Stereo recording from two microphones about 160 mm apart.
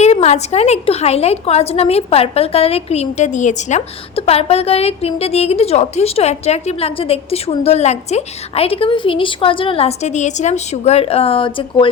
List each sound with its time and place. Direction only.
0.0 s a woman's voice: 45° left (ahead or behind)